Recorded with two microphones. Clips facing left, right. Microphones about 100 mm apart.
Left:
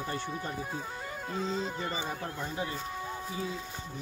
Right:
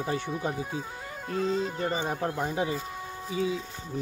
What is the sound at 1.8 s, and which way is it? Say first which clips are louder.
Speech: right 6 dB; 45° right (ahead or behind).